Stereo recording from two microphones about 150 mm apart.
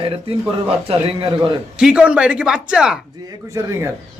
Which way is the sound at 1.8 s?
5° right (ahead or behind).